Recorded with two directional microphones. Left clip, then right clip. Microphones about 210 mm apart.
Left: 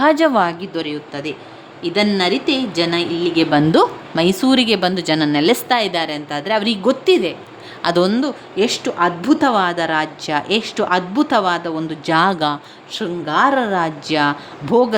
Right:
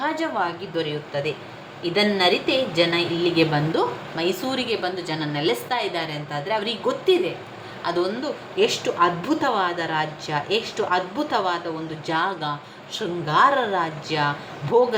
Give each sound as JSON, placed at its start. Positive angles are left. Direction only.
{"t": 0.0, "sound": "a woman's voice", "side_deg": 55}